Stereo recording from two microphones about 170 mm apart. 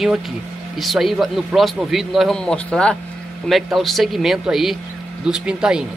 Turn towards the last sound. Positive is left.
turn(degrees=-5)  # may be behind; listen again after turning